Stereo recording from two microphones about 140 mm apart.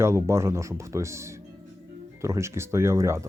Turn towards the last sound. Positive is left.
turn(degrees=-20)  # may be behind; listen again after turning